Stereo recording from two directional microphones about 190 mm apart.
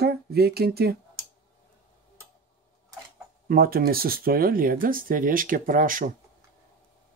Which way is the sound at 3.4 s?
50° right (ahead or behind).